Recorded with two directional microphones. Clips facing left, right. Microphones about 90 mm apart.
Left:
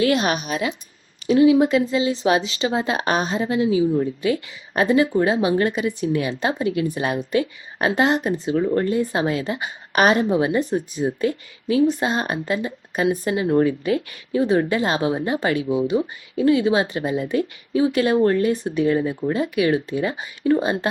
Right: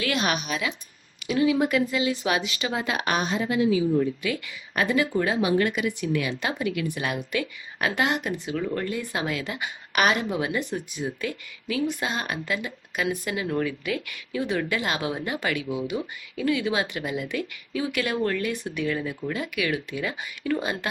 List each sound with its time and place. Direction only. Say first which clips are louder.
0.0 s speech: left 7 dB; 35° left (ahead or behind)
1.3 s speech: left 7 dB; 25° left (ahead or behind)